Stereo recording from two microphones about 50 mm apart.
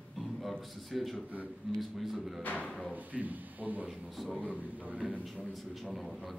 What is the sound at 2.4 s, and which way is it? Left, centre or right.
Speech, left.